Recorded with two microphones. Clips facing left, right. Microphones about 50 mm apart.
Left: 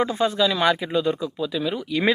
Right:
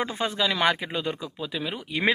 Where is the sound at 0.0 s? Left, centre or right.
Right.